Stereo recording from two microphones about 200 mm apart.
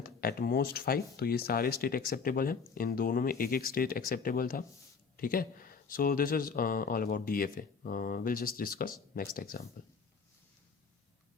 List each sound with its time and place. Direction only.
0.0 s speech: 50° left (ahead or behind)